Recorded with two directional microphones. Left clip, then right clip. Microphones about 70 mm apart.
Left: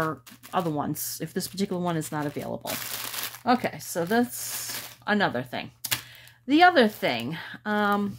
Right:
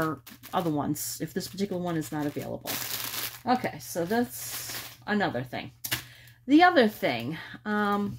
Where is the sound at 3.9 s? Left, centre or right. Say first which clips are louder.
Left 3 dB; left.